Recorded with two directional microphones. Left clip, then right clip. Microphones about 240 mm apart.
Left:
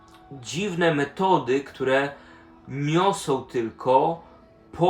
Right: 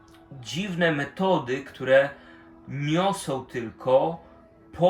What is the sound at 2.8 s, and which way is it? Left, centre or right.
Speech, centre.